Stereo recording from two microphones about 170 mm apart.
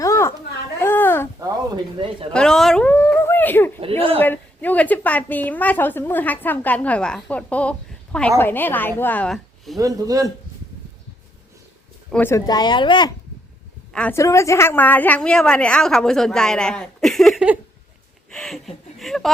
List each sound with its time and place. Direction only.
0.0 s a sound: 15° left (ahead or behind)
1.4 s speech: 25° right (ahead or behind)
2.3 s speech: 5° left (ahead or behind)
3.8 s a woman's voice: 35° right (ahead or behind)
4.2 s a woman's voice: 10° left (ahead or behind)
9.7 s speech: 20° right (ahead or behind)
12.1 s a woman's voice: 10° left (ahead or behind)
12.5 s speech: 25° left (ahead or behind)
13.9 s a woman's voice: 10° left (ahead or behind)